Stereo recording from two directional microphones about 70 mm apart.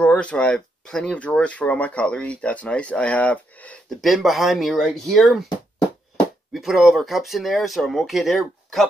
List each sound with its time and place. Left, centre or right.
0.0 s speech: centre
4.0 s speech: centre
4.7 s speech: centre
6.5 s speech: centre